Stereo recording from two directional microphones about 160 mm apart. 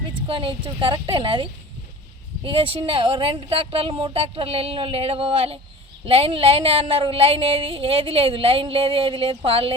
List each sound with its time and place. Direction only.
0.3 s a woman's voice: 35° right (ahead or behind)